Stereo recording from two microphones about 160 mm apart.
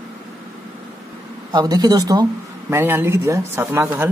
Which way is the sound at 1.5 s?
25° right (ahead or behind).